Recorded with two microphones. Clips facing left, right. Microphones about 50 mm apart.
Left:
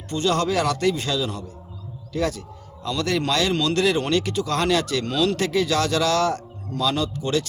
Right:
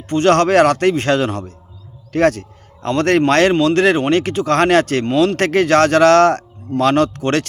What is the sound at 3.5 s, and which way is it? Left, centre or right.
Speech, right.